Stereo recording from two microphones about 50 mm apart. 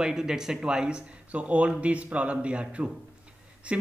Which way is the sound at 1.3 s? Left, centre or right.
Right.